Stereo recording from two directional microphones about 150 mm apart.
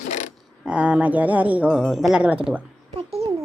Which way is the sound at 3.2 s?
45° right (ahead or behind).